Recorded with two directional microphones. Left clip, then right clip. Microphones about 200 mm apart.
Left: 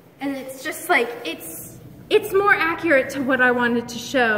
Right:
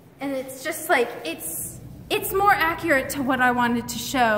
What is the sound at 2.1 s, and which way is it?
A woman's voice, 40° right (ahead or behind).